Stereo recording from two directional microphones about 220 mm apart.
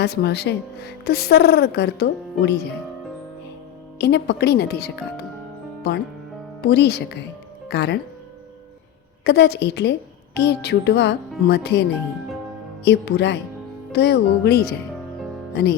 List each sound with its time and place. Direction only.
0.0 s speech: 50° left (ahead or behind)
3.9 s speech: 50° left (ahead or behind)
6.7 s speech: 50° left (ahead or behind)
9.2 s speech: 50° left (ahead or behind)
12.8 s speech: 50° left (ahead or behind)